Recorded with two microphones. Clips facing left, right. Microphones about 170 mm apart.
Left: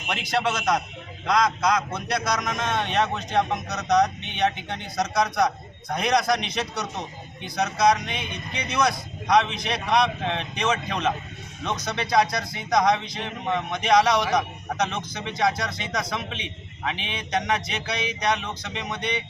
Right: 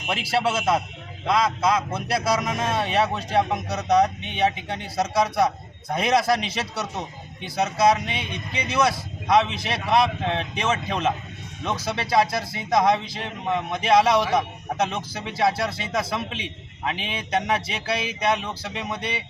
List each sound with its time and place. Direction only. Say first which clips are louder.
0.1 s speech: right 2 dB; 5° right (ahead or behind)
3.7 s speech: right 2 dB; 30° right (ahead or behind)
3.9 s speech: right 1 dB; 5° right (ahead or behind)